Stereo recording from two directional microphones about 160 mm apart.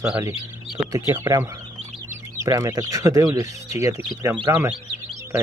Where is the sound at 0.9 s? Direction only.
20° right (ahead or behind).